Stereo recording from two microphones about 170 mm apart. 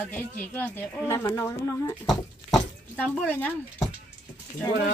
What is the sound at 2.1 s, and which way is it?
Speech, 5° left (ahead or behind).